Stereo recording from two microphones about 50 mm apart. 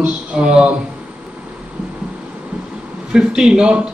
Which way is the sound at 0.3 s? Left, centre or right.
Centre.